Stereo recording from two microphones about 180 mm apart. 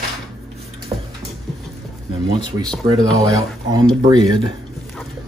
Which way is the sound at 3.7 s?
20° right (ahead or behind).